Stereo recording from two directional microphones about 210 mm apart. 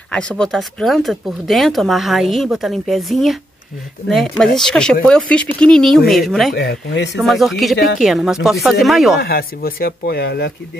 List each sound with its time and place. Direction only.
0.1 s speech: 5° left (ahead or behind)
6.5 s speech: 50° left (ahead or behind)
7.2 s speech: centre (ahead or behind)
9.2 s speech: 45° left (ahead or behind)